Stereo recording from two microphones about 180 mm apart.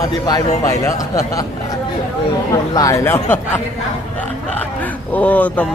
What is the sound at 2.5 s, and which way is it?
Speech, 20° left (ahead or behind).